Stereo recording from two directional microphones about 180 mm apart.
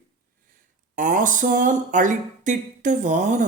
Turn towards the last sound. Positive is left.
turn(degrees=-45)  # may be behind; listen again after turning